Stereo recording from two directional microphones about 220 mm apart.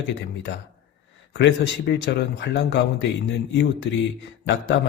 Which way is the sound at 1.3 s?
55° left (ahead or behind).